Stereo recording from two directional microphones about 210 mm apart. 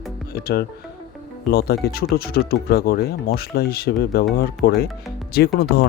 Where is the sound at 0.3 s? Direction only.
45° left (ahead or behind).